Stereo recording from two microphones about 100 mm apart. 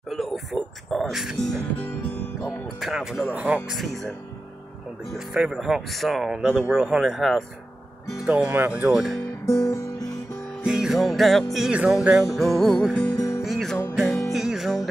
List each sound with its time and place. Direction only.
0.1 s music: centre (ahead or behind)
2.4 s speech: 5° right (ahead or behind)
3.7 s speech: centre (ahead or behind)
5.1 s speech: 5° right (ahead or behind)
8.2 s speech: 10° right (ahead or behind)
9.5 s guitar: 35° left (ahead or behind)
10.6 s music: 5° right (ahead or behind)
12.3 s speech: centre (ahead or behind)
13.1 s music: 35° left (ahead or behind)
13.4 s music: centre (ahead or behind)